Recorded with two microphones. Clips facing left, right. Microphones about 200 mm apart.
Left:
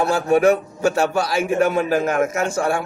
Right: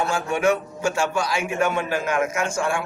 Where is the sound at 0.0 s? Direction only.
35° left (ahead or behind).